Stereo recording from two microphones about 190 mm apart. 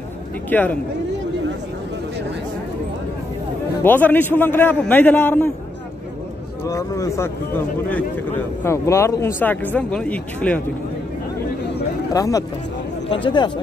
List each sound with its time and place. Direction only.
0.5 s a man's voice: 10° left (ahead or behind)
3.8 s a man's voice: 10° left (ahead or behind)
6.7 s a man's voice: 15° left (ahead or behind)
12.1 s speech: 20° left (ahead or behind)